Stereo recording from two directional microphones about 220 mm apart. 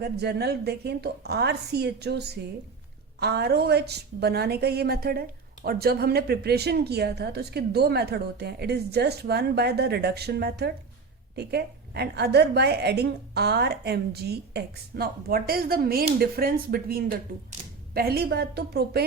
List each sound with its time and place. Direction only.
0.0 s a woman's voice: 45° right (ahead or behind)